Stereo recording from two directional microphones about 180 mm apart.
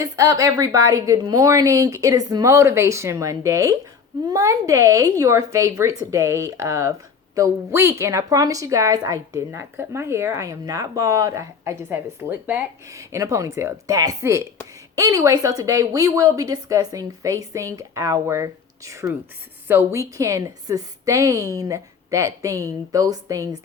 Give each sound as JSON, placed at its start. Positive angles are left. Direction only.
{"t": 0.0, "sound": "a woman's voice", "side_deg": -20}